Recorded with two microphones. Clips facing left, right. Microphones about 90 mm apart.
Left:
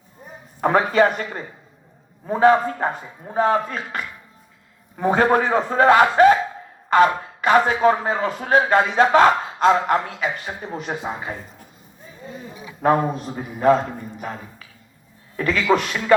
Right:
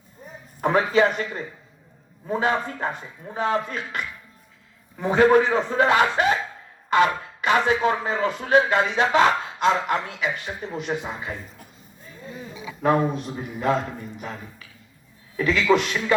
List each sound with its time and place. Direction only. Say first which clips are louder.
0.6 s a man's voice: left 3 dB; 45° left (ahead or behind)
12.8 s a man's voice: left 2 dB; 40° left (ahead or behind)
15.4 s a man's voice: even; 50° left (ahead or behind)